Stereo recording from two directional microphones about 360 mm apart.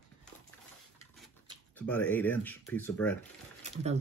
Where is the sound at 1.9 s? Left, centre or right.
Centre.